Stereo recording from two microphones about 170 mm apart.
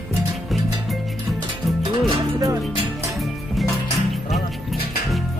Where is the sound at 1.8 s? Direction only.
25° right (ahead or behind).